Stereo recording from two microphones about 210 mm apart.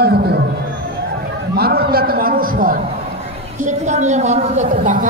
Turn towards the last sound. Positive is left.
turn(degrees=-35)  # may be behind; listen again after turning